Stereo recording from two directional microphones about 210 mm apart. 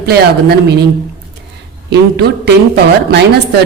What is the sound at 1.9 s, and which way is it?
Speech, 50° right (ahead or behind).